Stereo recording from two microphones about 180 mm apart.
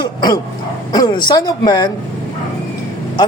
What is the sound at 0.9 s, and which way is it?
A man's voice, 20° left (ahead or behind).